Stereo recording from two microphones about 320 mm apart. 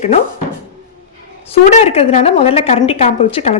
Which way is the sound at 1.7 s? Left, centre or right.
Centre.